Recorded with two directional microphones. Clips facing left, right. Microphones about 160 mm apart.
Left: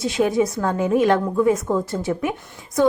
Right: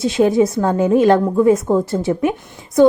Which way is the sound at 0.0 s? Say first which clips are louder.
Right 5 dB; 25° right (ahead or behind).